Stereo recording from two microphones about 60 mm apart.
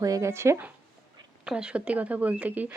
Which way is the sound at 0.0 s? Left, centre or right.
Right.